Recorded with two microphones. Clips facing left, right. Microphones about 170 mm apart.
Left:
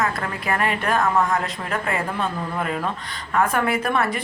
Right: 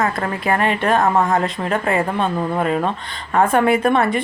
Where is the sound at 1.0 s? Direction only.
50° right (ahead or behind).